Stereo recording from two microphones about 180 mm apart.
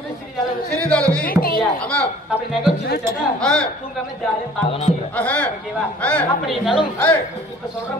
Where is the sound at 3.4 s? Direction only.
5° left (ahead or behind).